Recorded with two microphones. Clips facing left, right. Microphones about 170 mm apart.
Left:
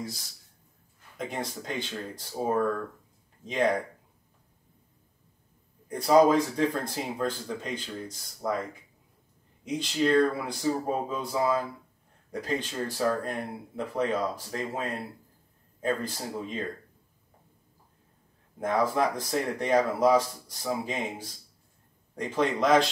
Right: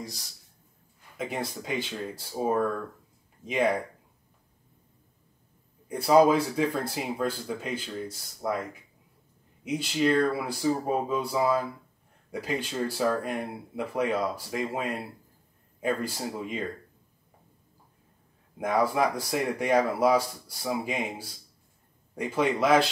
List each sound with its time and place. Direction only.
1.1 s speech: 5° right (ahead or behind)
5.9 s speech: 5° right (ahead or behind)
9.7 s speech: 10° right (ahead or behind)
18.6 s speech: 10° right (ahead or behind)